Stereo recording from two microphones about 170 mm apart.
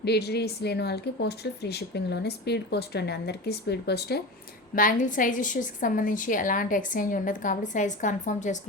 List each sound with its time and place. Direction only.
0.0 s speech: 75° left (ahead or behind)
4.7 s a woman's voice: 55° left (ahead or behind)